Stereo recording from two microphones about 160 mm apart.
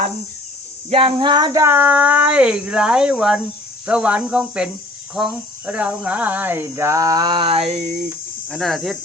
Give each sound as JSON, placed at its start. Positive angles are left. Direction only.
{"t": 0.9, "sound": "speech", "side_deg": -35}
{"t": 7.8, "sound": "speech", "side_deg": -65}
{"t": 8.4, "sound": "speech", "side_deg": 0}